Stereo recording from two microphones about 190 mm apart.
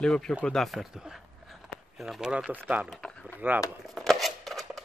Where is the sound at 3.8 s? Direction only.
Centre (ahead or behind).